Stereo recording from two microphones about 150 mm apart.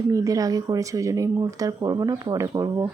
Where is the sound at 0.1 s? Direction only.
25° right (ahead or behind).